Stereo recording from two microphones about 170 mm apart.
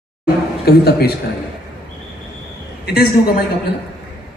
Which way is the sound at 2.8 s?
65° left (ahead or behind).